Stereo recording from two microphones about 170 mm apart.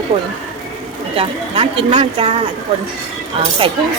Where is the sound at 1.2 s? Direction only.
35° right (ahead or behind).